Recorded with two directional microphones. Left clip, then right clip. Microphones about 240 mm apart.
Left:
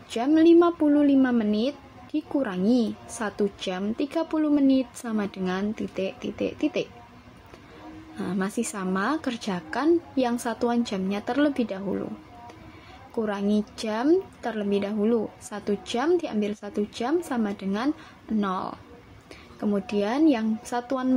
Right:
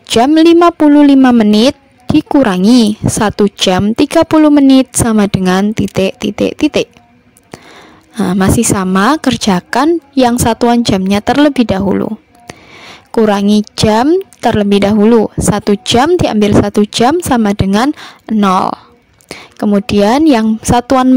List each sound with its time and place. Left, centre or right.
0.1 s a woman's voice: right
8.2 s a woman's voice: right
13.1 s a woman's voice: right